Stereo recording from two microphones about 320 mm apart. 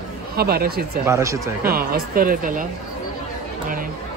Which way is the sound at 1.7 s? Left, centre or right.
Right.